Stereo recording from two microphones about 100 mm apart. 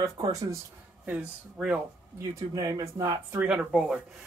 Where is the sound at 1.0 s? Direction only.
10° right (ahead or behind).